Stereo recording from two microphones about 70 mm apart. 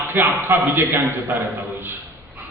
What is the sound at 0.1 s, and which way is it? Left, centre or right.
Speech, right.